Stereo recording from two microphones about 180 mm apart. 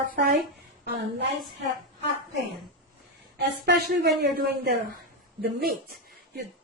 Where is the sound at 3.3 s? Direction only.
65° right (ahead or behind).